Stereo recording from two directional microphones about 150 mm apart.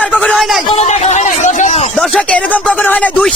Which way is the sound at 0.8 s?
45° left (ahead or behind).